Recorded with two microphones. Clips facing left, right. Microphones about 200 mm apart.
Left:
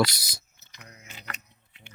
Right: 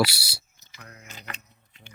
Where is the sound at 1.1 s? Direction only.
40° right (ahead or behind).